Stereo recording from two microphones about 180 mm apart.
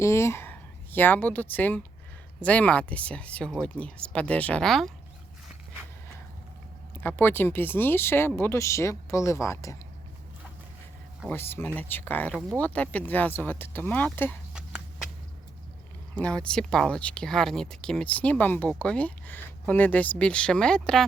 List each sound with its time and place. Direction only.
0.0 s speech: 15° left (ahead or behind)
7.0 s speech: 10° left (ahead or behind)
11.3 s speech: 15° left (ahead or behind)
12.3 s speech: 5° right (ahead or behind)
12.5 s speech: 10° left (ahead or behind)
16.1 s speech: 5° left (ahead or behind)